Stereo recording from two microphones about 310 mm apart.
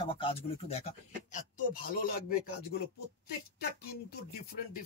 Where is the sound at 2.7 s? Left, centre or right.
Left.